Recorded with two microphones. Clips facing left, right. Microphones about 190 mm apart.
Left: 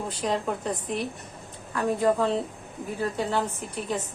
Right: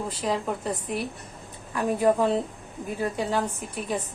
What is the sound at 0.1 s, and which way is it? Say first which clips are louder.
A woman's voice: left 2 dB; centre (ahead or behind).